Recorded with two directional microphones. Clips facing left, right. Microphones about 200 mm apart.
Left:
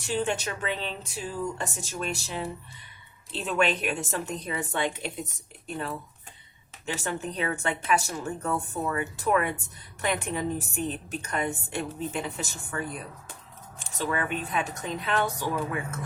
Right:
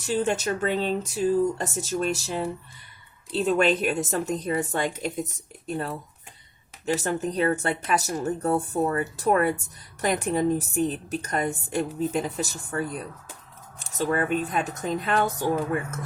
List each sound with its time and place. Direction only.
0.0 s a woman's voice: 40° right (ahead or behind)